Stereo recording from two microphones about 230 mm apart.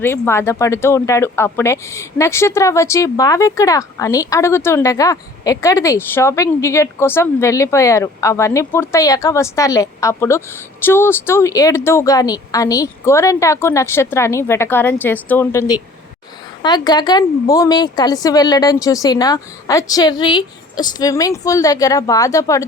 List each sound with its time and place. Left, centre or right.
0.0 s speech: centre